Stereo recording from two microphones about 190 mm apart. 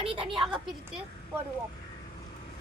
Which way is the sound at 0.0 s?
30° right (ahead or behind).